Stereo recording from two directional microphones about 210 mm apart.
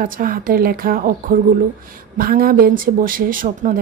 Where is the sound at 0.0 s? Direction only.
40° right (ahead or behind).